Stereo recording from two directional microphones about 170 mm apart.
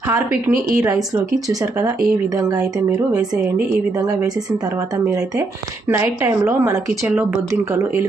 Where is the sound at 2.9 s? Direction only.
20° right (ahead or behind).